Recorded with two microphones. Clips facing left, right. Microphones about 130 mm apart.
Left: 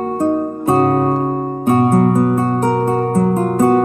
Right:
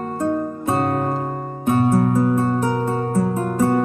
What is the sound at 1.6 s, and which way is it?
Music, 55° left (ahead or behind).